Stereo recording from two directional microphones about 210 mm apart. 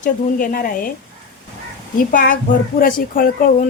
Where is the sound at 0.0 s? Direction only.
40° left (ahead or behind).